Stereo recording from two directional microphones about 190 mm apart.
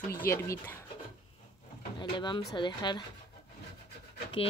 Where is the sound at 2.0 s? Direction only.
25° left (ahead or behind).